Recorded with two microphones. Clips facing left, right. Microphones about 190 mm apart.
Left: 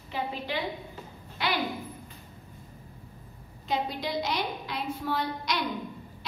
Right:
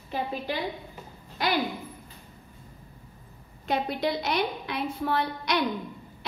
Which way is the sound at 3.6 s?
60° right (ahead or behind).